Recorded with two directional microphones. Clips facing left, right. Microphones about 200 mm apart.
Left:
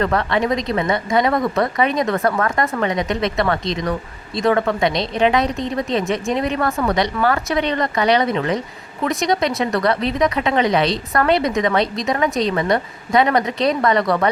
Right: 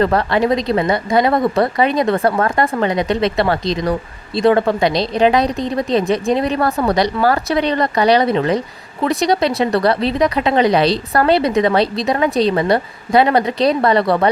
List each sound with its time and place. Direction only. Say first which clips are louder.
0.0 s speech: right 4 dB; 35° right (ahead or behind)